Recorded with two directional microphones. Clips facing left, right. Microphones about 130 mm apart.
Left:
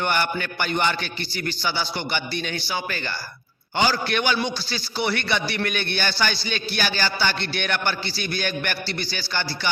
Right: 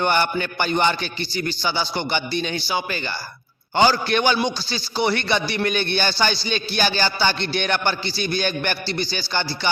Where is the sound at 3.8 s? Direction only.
30° right (ahead or behind).